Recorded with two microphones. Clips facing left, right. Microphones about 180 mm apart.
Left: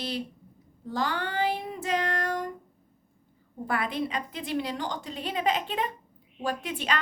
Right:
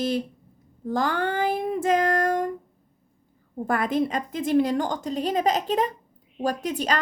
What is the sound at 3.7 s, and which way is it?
A woman's voice, 45° right (ahead or behind).